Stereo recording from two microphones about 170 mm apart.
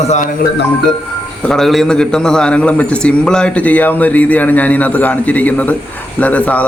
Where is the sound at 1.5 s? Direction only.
Centre (ahead or behind).